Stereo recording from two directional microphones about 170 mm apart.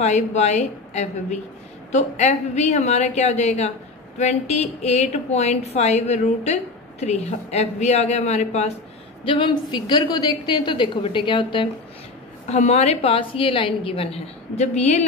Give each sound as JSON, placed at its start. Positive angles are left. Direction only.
{"t": 0.0, "sound": "a woman's voice", "side_deg": 40}
{"t": 9.2, "sound": "a woman's voice", "side_deg": 30}